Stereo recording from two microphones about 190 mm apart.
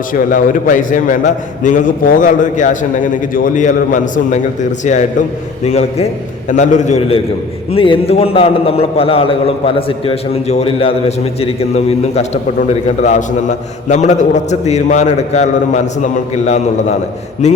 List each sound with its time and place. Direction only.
0.1 s a man's voice: 45° left (ahead or behind)
5.6 s a man's voice: 35° left (ahead or behind)
17.4 s a man's voice: 35° left (ahead or behind)